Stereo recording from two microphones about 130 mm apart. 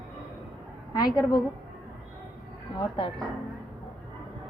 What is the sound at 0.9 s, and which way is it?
Speech, 30° left (ahead or behind).